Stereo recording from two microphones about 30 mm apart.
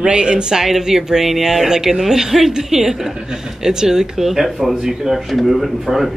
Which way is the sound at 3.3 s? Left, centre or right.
Right.